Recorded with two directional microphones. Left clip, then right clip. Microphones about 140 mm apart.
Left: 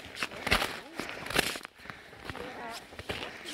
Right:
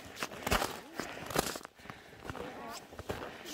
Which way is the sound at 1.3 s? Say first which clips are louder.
Left 5 dB; 15° left (ahead or behind).